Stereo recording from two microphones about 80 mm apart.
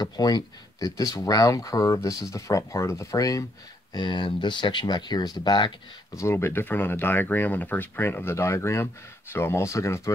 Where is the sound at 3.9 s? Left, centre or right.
Left.